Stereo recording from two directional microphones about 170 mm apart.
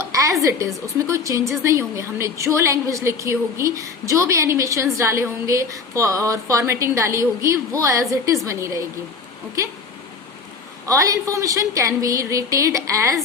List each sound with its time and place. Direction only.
0.0 s a sound: 20° right (ahead or behind)
0.4 s a woman's voice: 20° right (ahead or behind)
10.8 s a woman's voice: 20° right (ahead or behind)